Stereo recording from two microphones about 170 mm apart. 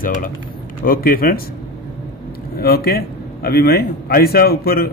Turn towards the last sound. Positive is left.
turn(degrees=65)  # may be behind; listen again after turning